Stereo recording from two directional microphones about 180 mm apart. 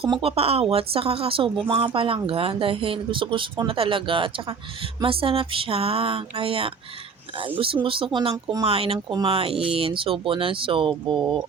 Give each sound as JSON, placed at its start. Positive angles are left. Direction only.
{"t": 0.0, "sound": "speech", "side_deg": -30}
{"t": 7.9, "sound": "speech", "side_deg": -30}